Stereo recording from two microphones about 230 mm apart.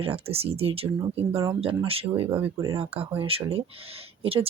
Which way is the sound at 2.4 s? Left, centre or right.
Centre.